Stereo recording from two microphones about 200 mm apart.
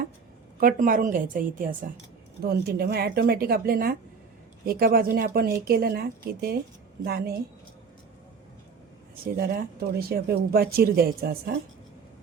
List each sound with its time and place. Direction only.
0.6 s a woman's voice: 45° right (ahead or behind)
9.2 s speech: 50° right (ahead or behind)